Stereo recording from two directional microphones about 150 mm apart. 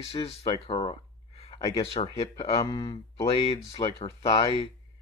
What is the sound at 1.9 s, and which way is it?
Speech, 30° left (ahead or behind).